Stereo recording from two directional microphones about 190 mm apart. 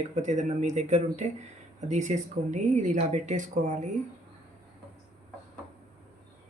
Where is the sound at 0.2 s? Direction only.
40° right (ahead or behind).